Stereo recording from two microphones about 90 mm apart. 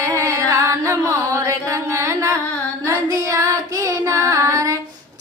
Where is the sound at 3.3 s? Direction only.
40° right (ahead or behind).